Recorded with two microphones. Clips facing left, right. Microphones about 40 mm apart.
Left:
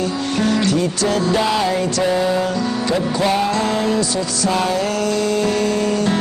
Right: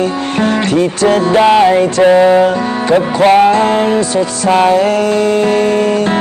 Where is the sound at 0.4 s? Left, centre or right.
Right.